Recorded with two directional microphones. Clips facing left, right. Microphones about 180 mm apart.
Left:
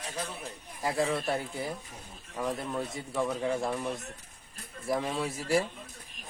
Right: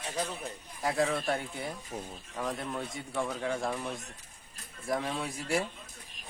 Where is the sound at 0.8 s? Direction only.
Centre (ahead or behind).